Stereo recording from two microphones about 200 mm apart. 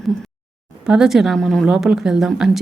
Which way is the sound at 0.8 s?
5° right (ahead or behind).